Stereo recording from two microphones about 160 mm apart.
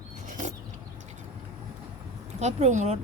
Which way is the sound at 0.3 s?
50° right (ahead or behind).